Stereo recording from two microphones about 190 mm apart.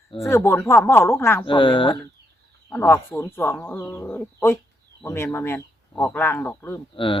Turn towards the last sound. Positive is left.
turn(degrees=25)  # may be behind; listen again after turning